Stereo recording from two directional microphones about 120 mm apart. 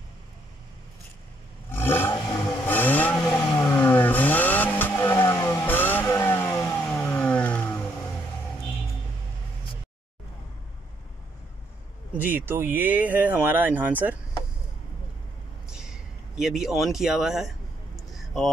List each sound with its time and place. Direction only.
1.7 s a sound: 20° left (ahead or behind)
2.6 s vehicle: 15° left (ahead or behind)
5.4 s music: 25° left (ahead or behind)
5.7 s vehicle: 15° left (ahead or behind)
12.2 s speech: 15° right (ahead or behind)
15.7 s speech: 5° right (ahead or behind)
17.9 s a sound: centre (ahead or behind)